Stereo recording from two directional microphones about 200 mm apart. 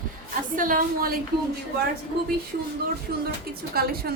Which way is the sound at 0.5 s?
45° right (ahead or behind).